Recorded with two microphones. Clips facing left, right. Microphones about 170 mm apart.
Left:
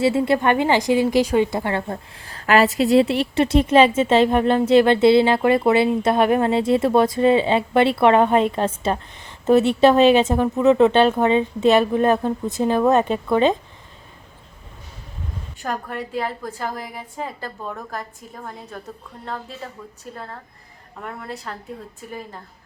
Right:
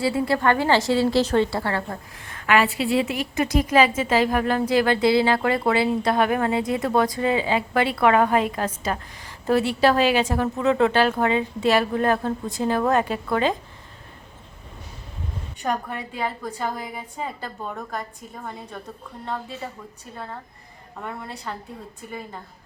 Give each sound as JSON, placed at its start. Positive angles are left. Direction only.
{"t": 0.0, "sound": "a woman's voice", "side_deg": 25}
{"t": 15.6, "sound": "a woman's voice", "side_deg": 0}
{"t": 21.0, "sound": "a woman's voice", "side_deg": 0}